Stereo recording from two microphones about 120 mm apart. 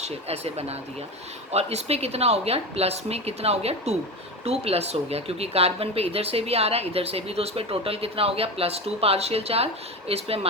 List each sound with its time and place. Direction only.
0.0 s speech: 60° right (ahead or behind)